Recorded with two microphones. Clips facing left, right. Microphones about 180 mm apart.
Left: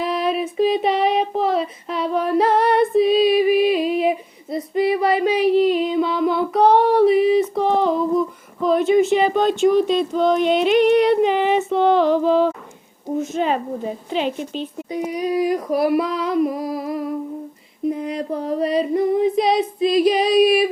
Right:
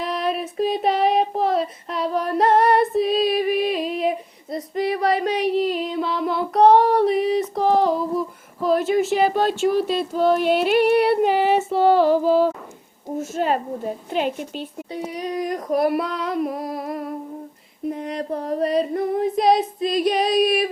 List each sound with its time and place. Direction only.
0.0 s child singing: centre (ahead or behind)
8.6 s speech: 5° right (ahead or behind)
13.1 s a woman's voice: 45° right (ahead or behind)
14.3 s speech: 10° right (ahead or behind)
14.9 s female singing: 10° left (ahead or behind)